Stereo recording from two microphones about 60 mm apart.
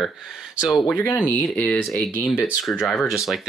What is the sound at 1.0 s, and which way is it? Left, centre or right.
Speech, left.